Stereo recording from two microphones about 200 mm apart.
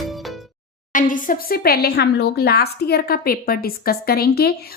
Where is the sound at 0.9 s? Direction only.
40° left (ahead or behind).